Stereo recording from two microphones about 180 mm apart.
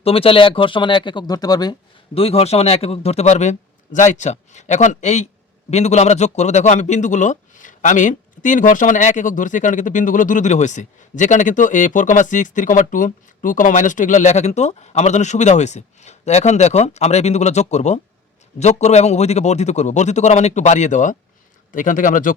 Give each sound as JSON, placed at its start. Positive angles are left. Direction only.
{"t": 0.0, "sound": "speech", "side_deg": 30}
{"t": 2.1, "sound": "a man's voice", "side_deg": 35}